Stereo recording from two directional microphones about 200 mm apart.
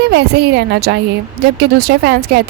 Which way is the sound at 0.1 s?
55° right (ahead or behind).